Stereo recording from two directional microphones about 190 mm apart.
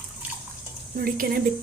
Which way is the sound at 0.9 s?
50° right (ahead or behind).